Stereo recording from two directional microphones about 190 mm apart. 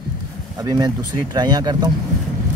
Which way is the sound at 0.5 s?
20° right (ahead or behind).